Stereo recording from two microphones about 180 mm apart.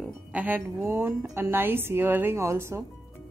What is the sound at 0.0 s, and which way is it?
A woman's voice, 10° right (ahead or behind).